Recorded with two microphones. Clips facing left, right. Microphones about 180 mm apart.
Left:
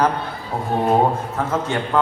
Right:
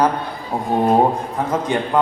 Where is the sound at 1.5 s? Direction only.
15° right (ahead or behind).